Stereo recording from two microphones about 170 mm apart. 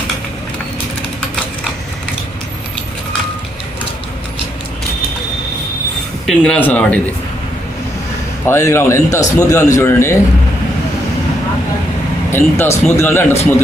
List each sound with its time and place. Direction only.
6.2 s a man's voice: 5° left (ahead or behind)
8.4 s a man's voice: 15° left (ahead or behind)
12.3 s a man's voice: 15° left (ahead or behind)